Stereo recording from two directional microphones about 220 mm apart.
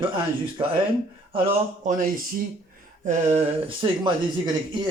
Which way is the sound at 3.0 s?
25° right (ahead or behind).